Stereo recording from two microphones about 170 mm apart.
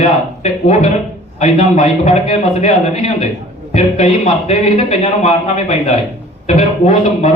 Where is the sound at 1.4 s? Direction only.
45° left (ahead or behind).